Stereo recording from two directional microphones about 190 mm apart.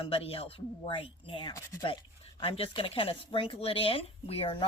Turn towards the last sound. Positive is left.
turn(degrees=30)  # may be behind; listen again after turning